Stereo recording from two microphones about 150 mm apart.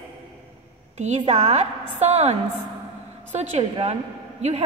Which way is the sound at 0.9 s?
50° right (ahead or behind).